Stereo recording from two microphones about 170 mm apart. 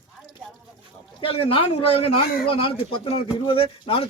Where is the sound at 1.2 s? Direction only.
35° left (ahead or behind).